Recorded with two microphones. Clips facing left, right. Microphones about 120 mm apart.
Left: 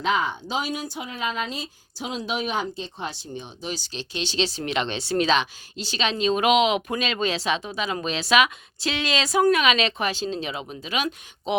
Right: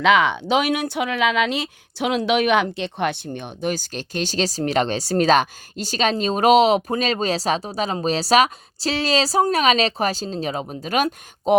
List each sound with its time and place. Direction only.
0.0 s speech: 75° right (ahead or behind); by 11.5 s 45° right (ahead or behind)